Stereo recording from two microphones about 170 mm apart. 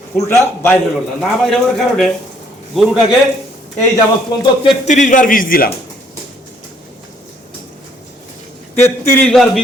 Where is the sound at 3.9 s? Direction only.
25° left (ahead or behind).